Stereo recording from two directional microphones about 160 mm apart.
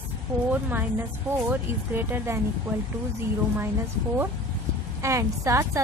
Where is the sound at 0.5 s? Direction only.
10° right (ahead or behind).